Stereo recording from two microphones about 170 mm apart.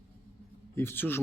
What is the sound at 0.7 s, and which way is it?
Speech, 15° left (ahead or behind).